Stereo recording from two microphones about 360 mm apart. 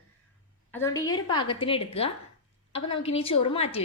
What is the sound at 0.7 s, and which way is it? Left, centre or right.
A woman's voice, centre.